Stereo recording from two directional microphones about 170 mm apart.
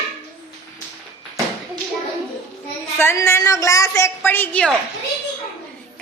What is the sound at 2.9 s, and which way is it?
A woman's voice, 15° left (ahead or behind).